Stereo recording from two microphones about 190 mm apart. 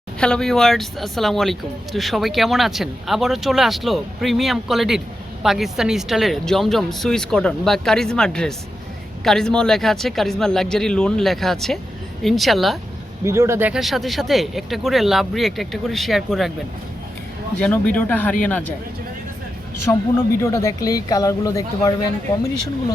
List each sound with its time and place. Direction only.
0.2 s speech: 5° left (ahead or behind)
13.2 s speech: 15° right (ahead or behind)
17.6 s speech: 5° left (ahead or behind)
19.9 s speech: 15° left (ahead or behind)